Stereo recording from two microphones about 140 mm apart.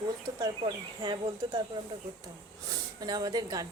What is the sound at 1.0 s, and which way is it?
Speech, 35° right (ahead or behind).